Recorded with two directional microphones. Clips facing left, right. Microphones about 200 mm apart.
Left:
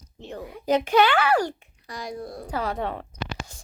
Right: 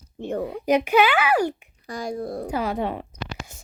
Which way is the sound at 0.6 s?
10° right (ahead or behind).